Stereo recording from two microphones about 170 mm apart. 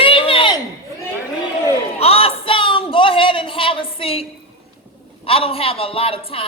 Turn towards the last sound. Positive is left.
turn(degrees=35)  # may be behind; listen again after turning